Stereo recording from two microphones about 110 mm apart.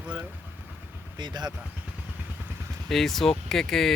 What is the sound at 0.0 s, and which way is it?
Vehicle, 15° right (ahead or behind).